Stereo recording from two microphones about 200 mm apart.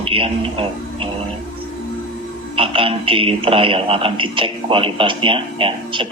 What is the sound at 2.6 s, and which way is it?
Speech, 25° right (ahead or behind).